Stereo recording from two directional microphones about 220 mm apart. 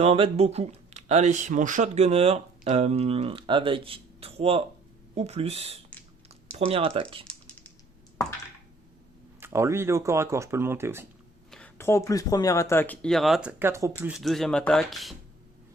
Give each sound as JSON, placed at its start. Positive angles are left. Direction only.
{"t": 0.0, "sound": "speech", "side_deg": -25}
{"t": 9.4, "sound": "speech", "side_deg": -10}
{"t": 11.5, "sound": "speech", "side_deg": 10}
{"t": 14.2, "sound": "speech", "side_deg": 0}